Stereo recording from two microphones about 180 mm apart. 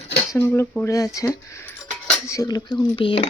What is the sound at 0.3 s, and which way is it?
Speech, 15° left (ahead or behind).